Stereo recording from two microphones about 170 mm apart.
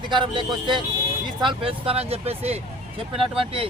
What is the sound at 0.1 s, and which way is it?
Speech, 30° right (ahead or behind).